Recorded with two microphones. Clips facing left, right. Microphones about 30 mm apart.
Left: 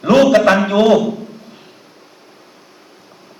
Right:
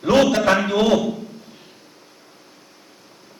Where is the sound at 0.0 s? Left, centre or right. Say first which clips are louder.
Left 5 dB; centre.